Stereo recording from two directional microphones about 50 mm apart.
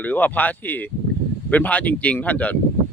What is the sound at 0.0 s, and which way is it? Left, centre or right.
Speech, left.